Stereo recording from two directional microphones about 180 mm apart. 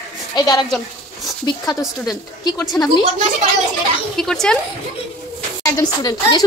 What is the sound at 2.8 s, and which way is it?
Speech, 10° left (ahead or behind).